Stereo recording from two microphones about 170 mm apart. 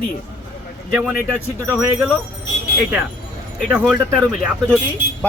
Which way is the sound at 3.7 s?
10° right (ahead or behind).